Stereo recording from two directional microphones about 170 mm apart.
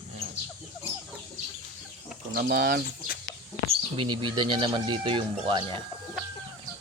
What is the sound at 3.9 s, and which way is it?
Speech, 30° right (ahead or behind).